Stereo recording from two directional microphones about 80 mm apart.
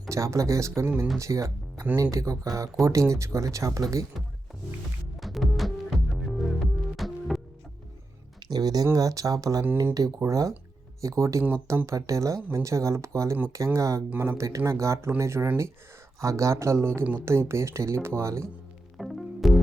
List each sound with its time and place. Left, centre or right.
0.1 s speech: right
5.2 s music: centre
8.4 s speech: right
14.1 s speech: right
18.9 s music: centre